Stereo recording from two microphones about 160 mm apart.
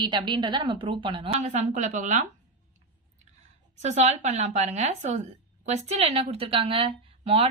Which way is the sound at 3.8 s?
45° right (ahead or behind).